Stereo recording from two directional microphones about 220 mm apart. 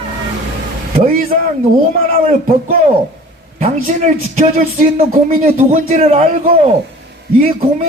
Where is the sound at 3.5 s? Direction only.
30° right (ahead or behind).